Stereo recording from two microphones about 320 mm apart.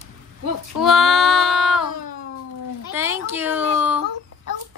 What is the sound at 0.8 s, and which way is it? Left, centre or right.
A woman's voice, centre.